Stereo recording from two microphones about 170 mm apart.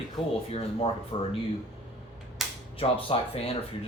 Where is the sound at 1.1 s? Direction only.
35° left (ahead or behind).